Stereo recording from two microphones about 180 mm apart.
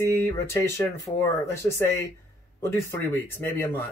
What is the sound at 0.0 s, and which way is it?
Speech, 15° left (ahead or behind).